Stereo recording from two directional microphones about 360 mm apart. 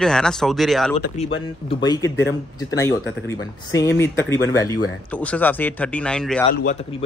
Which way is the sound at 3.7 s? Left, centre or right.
Centre.